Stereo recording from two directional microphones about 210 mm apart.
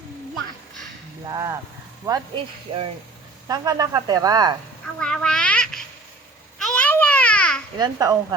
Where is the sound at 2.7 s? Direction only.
25° right (ahead or behind).